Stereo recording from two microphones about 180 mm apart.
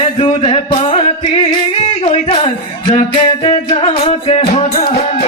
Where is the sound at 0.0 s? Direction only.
30° left (ahead or behind).